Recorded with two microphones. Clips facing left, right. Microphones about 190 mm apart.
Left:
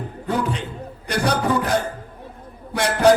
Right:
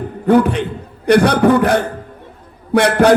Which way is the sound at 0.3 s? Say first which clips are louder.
Right 12 dB; 60° right (ahead or behind).